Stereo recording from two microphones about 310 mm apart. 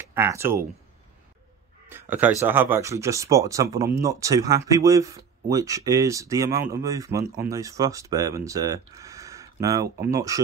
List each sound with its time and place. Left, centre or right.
0.0 s speech: centre
1.9 s a sound: centre
2.4 s speech: centre